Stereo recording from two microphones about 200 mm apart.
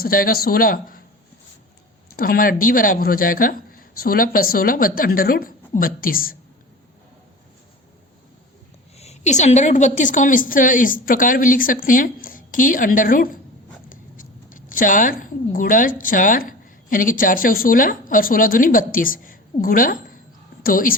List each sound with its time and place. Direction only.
0.0 s a woman's voice: 45° left (ahead or behind)
2.1 s a woman's voice: 45° left (ahead or behind)
9.0 s a woman's voice: 35° left (ahead or behind)